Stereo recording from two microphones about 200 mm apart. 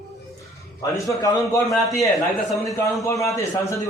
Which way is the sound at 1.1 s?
15° left (ahead or behind).